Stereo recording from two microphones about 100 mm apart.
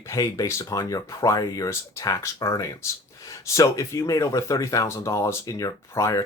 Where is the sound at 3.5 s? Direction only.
30° left (ahead or behind).